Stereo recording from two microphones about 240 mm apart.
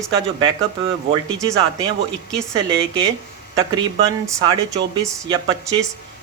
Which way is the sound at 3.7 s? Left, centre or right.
Centre.